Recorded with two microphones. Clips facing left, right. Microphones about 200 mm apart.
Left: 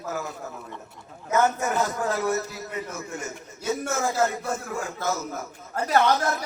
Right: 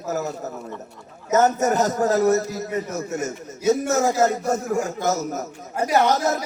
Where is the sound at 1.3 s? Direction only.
40° right (ahead or behind).